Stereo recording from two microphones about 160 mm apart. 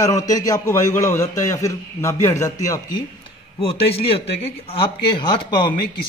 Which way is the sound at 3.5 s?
35° left (ahead or behind).